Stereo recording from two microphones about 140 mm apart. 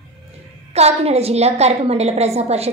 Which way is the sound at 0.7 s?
50° right (ahead or behind).